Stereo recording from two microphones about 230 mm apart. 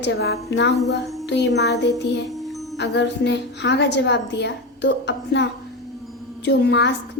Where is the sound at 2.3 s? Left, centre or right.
Centre.